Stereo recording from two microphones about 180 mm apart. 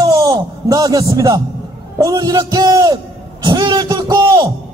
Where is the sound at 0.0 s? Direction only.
20° right (ahead or behind).